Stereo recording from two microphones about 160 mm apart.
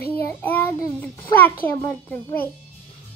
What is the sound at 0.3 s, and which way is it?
Child singing, 10° left (ahead or behind).